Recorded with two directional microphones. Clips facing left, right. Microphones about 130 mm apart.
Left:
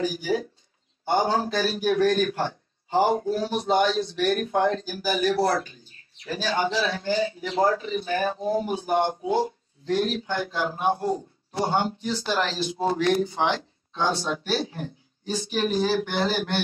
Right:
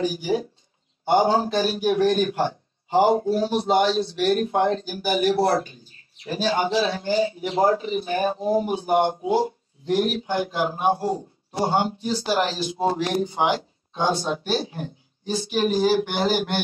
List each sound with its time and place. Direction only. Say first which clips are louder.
0.0 s a man's voice: right 2 dB; 25° right (ahead or behind)
12.4 s a man's voice: right 3 dB; 20° right (ahead or behind)